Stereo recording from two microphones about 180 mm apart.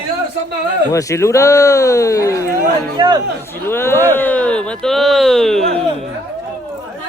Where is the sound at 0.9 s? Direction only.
15° left (ahead or behind).